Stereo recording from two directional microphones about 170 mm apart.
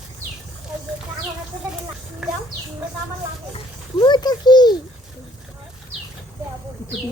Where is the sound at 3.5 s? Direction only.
25° left (ahead or behind).